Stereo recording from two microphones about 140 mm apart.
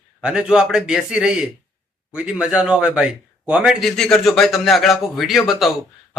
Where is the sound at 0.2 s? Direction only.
5° right (ahead or behind).